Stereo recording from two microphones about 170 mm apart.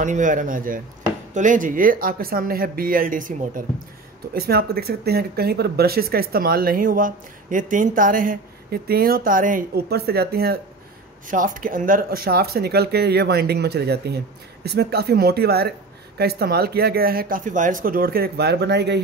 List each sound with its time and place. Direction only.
0.0 s speech: 50° right (ahead or behind)
4.3 s speech: 65° right (ahead or behind)
11.2 s speech: 50° right (ahead or behind); by 18.9 s 80° right